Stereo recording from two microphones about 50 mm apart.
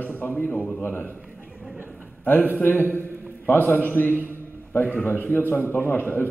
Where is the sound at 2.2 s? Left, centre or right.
Left.